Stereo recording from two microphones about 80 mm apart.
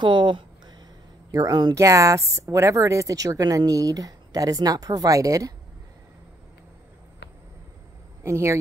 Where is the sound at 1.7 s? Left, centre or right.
Right.